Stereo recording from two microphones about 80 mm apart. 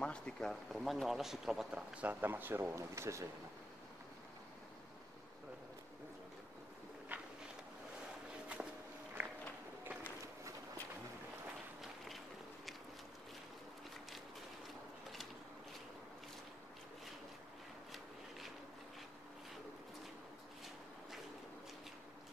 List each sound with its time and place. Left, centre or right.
0.0 s speech: centre; by 3.3 s right
7.1 s a sound: centre
9.2 s run: right
11.8 s run: centre